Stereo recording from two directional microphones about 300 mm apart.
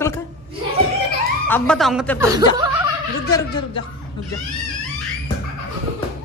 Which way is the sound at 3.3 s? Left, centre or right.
Centre.